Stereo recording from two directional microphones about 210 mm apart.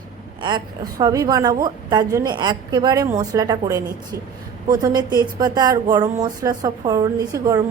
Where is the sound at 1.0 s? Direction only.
15° right (ahead or behind).